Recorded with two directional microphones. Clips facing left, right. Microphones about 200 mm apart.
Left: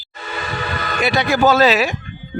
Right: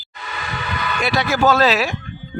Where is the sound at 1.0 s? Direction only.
Centre (ahead or behind).